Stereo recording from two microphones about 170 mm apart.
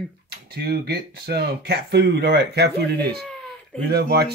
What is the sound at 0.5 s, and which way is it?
Speech, 65° right (ahead or behind).